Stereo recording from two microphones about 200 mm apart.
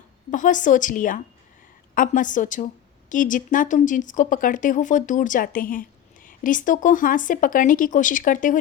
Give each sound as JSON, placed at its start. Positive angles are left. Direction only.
{"t": 0.3, "sound": "speech", "side_deg": 40}